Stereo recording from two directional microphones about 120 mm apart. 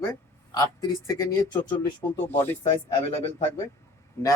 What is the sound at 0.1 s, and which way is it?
Speech, 30° left (ahead or behind).